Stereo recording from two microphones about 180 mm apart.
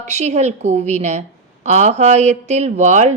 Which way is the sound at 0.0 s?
40° right (ahead or behind).